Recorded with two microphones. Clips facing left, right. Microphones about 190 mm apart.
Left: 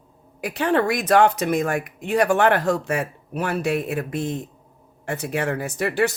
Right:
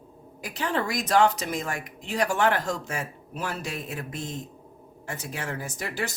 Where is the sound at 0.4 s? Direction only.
65° left (ahead or behind).